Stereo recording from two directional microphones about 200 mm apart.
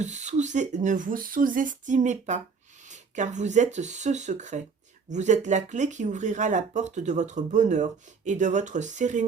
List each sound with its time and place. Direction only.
0.0 s speech: 35° right (ahead or behind)